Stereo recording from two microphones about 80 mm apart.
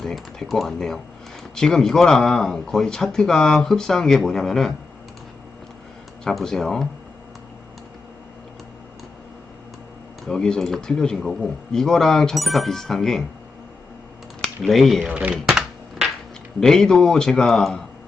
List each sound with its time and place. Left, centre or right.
0.0 s speech: centre
6.2 s speech: centre
10.2 s speech: centre
14.6 s speech: centre
15.1 s typing: centre
16.6 s speech: centre